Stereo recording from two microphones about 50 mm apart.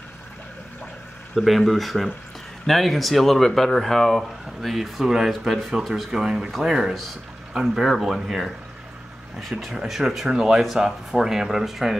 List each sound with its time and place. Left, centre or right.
1.3 s speech: centre
9.7 s speech: centre